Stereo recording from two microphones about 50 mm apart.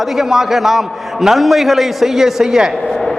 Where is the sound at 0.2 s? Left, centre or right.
Centre.